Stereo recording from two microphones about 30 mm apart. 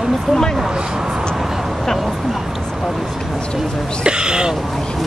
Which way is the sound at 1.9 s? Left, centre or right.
Centre.